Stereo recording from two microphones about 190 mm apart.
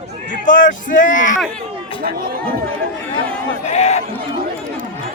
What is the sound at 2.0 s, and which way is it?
Speech, 50° right (ahead or behind).